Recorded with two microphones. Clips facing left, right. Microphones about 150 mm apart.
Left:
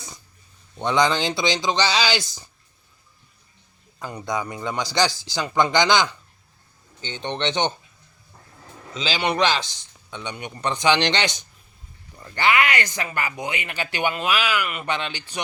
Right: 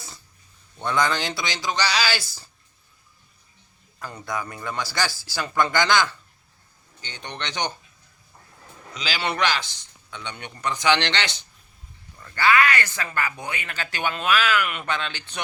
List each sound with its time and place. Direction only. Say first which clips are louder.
0.8 s a man's voice: left 3 dB; 20° left (ahead or behind)
4.0 s a man's voice: left 3 dB; 20° left (ahead or behind)
8.9 s a man's voice: left 4 dB; 25° left (ahead or behind)